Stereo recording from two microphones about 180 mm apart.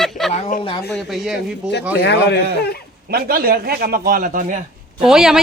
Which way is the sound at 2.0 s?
70° left (ahead or behind).